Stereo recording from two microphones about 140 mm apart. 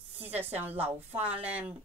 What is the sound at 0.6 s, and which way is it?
Speech, 15° right (ahead or behind).